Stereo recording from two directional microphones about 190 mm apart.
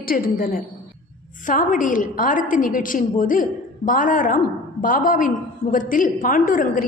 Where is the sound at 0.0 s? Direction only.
50° left (ahead or behind).